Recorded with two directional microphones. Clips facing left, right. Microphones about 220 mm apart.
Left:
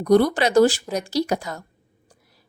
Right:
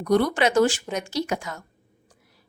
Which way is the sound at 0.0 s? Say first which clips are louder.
Left 4 dB; 35° left (ahead or behind).